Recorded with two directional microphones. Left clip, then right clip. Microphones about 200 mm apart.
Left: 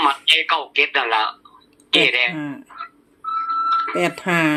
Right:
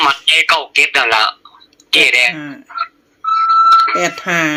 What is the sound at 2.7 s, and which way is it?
Music, 35° right (ahead or behind).